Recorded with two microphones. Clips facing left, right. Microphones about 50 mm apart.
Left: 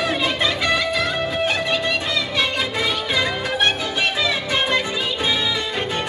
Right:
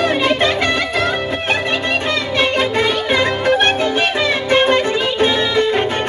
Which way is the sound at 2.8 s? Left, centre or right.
Right.